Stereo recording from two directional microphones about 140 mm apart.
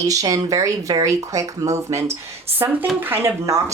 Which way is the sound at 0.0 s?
25° right (ahead or behind).